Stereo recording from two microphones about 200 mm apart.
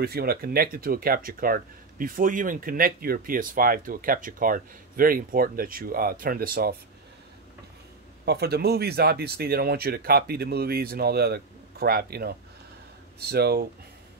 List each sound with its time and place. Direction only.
0.0 s speech: 50° right (ahead or behind)
8.3 s speech: 55° right (ahead or behind)